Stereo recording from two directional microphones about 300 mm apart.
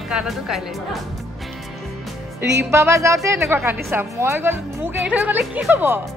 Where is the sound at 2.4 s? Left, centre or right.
Right.